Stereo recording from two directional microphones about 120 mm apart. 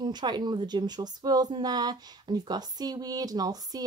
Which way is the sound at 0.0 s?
35° right (ahead or behind).